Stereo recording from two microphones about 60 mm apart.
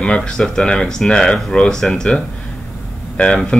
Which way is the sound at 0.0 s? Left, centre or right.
Centre.